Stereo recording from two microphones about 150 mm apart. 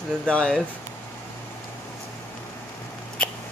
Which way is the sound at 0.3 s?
5° left (ahead or behind).